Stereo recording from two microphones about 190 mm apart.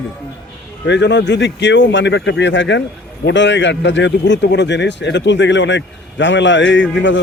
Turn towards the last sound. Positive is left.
turn(degrees=75)  # may be behind; listen again after turning